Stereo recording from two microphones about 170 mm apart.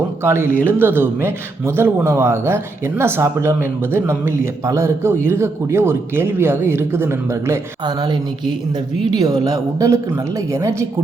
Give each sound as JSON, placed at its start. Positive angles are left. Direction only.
{"t": 0.2, "sound": "a man's voice", "side_deg": -15}